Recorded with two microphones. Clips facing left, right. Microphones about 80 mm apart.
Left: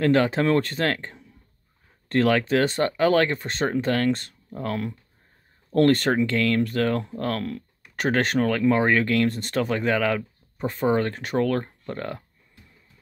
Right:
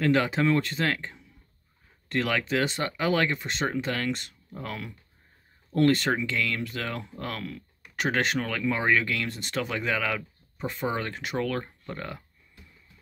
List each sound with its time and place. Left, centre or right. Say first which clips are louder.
0.0 s speech: left 4 dB; left